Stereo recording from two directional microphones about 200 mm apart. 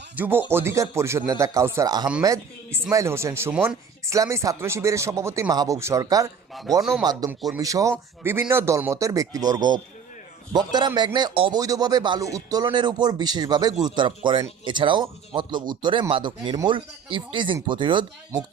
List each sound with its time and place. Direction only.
0.2 s speech: 10° right (ahead or behind)